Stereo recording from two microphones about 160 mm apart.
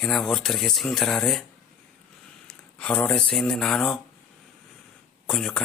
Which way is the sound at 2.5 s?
5° left (ahead or behind).